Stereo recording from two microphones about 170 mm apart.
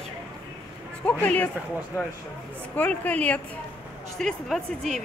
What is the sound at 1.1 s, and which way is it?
Speech, 10° left (ahead or behind).